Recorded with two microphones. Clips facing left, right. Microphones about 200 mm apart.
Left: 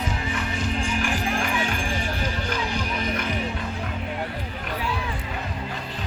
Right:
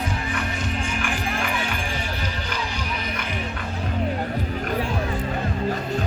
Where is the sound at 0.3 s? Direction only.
35° left (ahead or behind).